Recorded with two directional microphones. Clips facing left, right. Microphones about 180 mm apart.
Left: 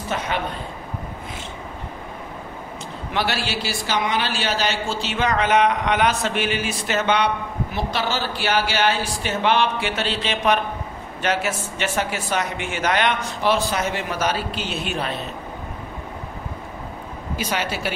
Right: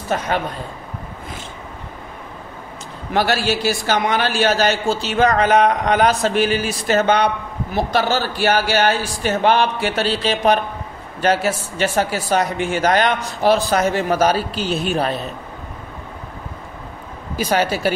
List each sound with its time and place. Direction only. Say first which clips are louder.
0.1 s a man's voice: right 4 dB; 45° right (ahead or behind)
3.1 s a man's voice: right 6 dB; 45° right (ahead or behind)
17.5 s a man's voice: right 8 dB; 40° right (ahead or behind)